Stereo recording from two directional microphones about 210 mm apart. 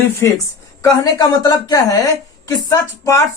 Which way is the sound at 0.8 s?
15° left (ahead or behind).